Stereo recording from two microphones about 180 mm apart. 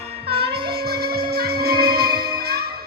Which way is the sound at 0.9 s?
60° right (ahead or behind).